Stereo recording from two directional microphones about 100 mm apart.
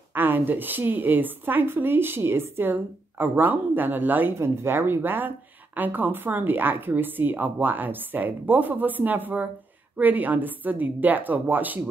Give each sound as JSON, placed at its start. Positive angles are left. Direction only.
{"t": 0.1, "sound": "a woman's voice", "side_deg": -20}